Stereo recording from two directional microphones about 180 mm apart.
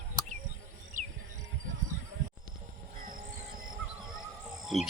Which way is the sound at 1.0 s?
45° right (ahead or behind).